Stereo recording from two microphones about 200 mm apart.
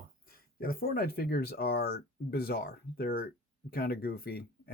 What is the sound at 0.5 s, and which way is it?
Speech, 45° left (ahead or behind).